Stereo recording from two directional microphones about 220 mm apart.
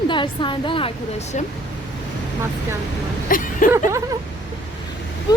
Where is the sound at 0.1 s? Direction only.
20° left (ahead or behind).